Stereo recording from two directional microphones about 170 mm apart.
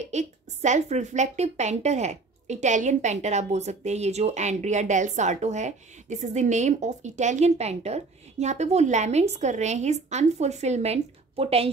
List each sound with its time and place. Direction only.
0.0 s a woman's voice: 40° right (ahead or behind)